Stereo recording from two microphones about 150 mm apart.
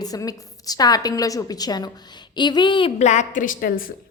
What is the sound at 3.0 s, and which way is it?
Speech, 50° left (ahead or behind).